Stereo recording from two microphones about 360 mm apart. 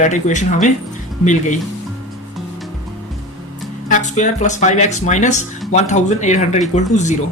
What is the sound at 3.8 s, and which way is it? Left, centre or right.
Speech, left.